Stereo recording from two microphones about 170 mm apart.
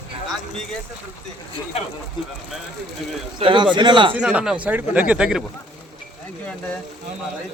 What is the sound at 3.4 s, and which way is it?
Speech, 30° right (ahead or behind).